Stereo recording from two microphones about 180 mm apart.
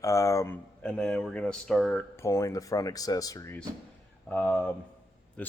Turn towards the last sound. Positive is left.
turn(degrees=5)  # may be behind; listen again after turning